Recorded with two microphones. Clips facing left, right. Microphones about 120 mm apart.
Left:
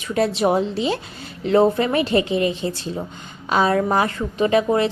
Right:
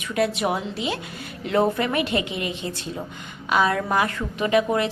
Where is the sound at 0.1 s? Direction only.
30° left (ahead or behind).